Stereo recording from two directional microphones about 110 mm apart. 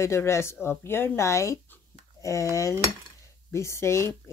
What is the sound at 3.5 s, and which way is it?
Speech, 25° left (ahead or behind).